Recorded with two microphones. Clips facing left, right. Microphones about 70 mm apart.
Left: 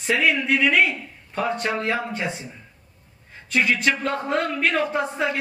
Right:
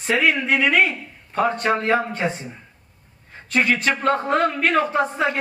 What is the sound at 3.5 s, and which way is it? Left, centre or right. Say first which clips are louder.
Speech: right 2 dB; right.